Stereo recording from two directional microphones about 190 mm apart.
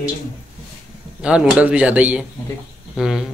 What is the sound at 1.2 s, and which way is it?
A man's voice, 5° right (ahead or behind).